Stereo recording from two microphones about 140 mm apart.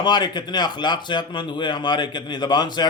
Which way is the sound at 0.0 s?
30° left (ahead or behind).